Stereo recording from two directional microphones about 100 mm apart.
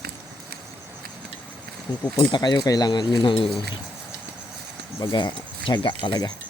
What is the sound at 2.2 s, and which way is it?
Speech, 50° left (ahead or behind).